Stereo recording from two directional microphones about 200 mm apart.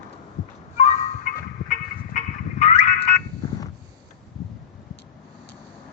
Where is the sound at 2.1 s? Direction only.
40° left (ahead or behind).